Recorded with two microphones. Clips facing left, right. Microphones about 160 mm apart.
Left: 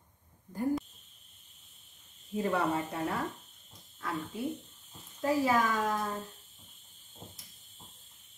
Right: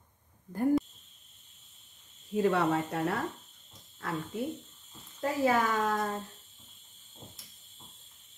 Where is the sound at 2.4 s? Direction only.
70° right (ahead or behind).